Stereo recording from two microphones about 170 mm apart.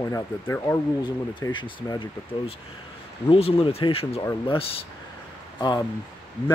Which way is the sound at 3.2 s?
35° left (ahead or behind).